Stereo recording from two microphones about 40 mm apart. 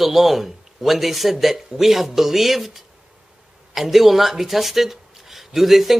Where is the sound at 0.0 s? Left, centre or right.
Centre.